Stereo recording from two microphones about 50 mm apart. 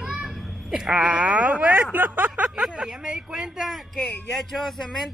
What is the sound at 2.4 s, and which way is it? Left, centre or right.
Speech, centre.